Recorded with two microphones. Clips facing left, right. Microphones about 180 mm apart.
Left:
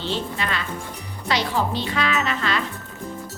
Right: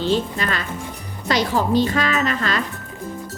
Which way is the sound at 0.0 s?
45° right (ahead or behind).